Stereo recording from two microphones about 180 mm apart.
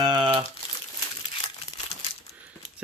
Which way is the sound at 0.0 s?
25° right (ahead or behind).